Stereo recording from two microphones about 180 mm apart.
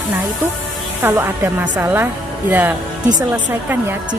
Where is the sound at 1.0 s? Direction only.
10° right (ahead or behind).